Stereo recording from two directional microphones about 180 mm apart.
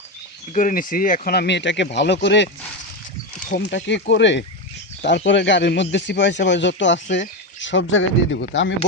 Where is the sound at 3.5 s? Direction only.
75° left (ahead or behind).